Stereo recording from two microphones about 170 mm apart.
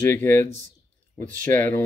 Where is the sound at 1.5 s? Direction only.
10° left (ahead or behind).